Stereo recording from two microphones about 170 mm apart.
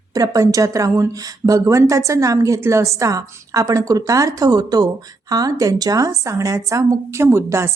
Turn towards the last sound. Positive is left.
turn(degrees=-15)  # may be behind; listen again after turning